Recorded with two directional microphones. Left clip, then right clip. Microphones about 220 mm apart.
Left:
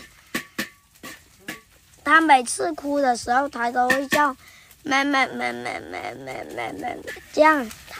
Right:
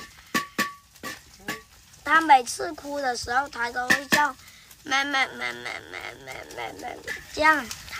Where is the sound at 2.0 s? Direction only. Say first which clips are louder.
Left 2 dB; 35° left (ahead or behind).